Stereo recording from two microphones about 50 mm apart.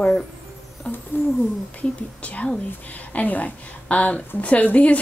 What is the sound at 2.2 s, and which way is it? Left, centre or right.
A woman's voice, left.